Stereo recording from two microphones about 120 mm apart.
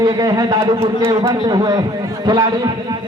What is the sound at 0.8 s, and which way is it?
Speech, 20° right (ahead or behind).